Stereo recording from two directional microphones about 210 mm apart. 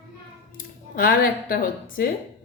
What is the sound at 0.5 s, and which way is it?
Music, 45° left (ahead or behind).